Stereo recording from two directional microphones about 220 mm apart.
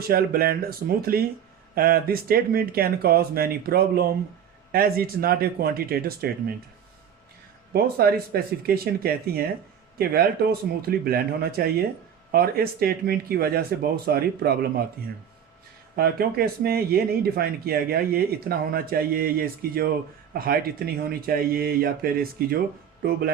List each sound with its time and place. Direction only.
0.1 s speech: 40° right (ahead or behind)
7.7 s speech: 45° right (ahead or behind)
16.0 s speech: 45° right (ahead or behind)